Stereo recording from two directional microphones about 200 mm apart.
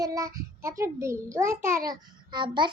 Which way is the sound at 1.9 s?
20° right (ahead or behind).